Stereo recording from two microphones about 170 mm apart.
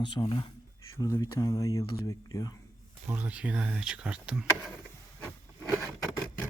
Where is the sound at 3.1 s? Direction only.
10° right (ahead or behind).